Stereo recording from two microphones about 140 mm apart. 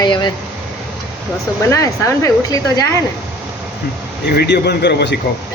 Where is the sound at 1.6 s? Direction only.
20° left (ahead or behind).